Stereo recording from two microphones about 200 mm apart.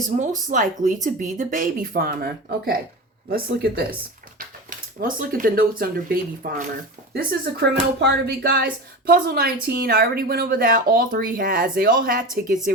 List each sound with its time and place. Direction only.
0.2 s speech: 40° right (ahead or behind)